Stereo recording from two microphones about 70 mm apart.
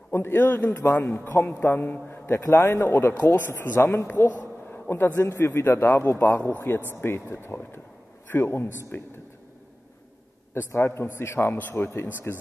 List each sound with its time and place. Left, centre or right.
0.1 s a man's voice: left
10.5 s speech: left